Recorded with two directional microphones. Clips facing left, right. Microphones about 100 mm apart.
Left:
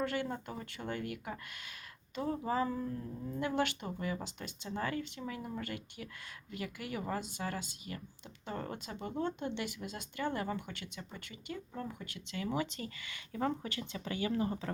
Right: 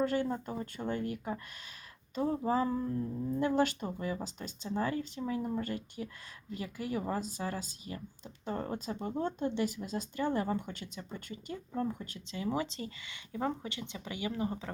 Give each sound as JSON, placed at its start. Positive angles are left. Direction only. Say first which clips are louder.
{"t": 0.0, "sound": "speech", "louder": "right 5 dB", "side_deg": -40}